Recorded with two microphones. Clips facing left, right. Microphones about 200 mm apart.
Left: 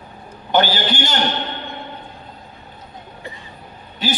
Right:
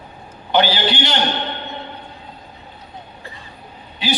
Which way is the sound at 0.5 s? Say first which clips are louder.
Even; 45° left (ahead or behind).